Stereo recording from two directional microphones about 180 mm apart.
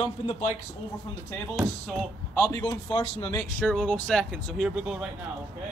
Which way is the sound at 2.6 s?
30° left (ahead or behind).